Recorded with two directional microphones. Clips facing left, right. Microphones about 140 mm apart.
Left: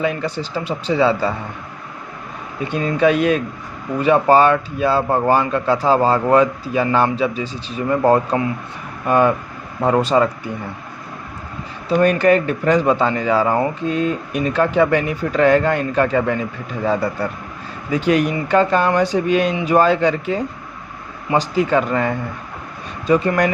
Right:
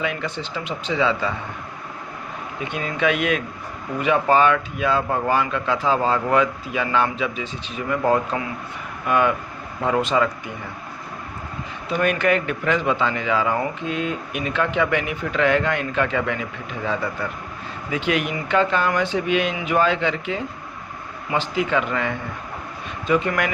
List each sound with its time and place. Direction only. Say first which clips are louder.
0.0 s speech: left 5 dB; 35° left (ahead or behind)
2.7 s speech: left 7 dB; 35° left (ahead or behind)
11.9 s speech: left 6 dB; 35° left (ahead or behind)